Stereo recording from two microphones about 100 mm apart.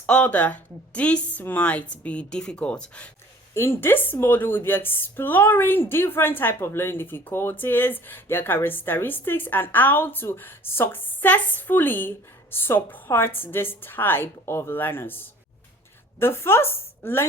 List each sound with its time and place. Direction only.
0.0 s a woman's voice: 15° left (ahead or behind)
3.5 s a woman's voice: 25° left (ahead or behind)